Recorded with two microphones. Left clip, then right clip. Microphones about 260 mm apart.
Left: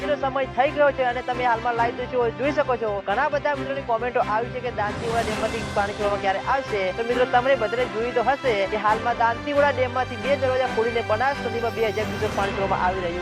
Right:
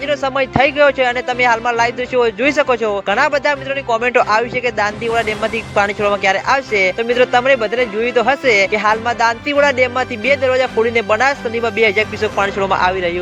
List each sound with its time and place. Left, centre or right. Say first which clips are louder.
0.1 s speech: right 8 dB; right